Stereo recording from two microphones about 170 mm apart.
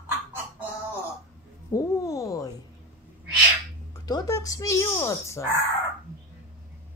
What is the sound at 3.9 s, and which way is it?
Speech, 25° left (ahead or behind).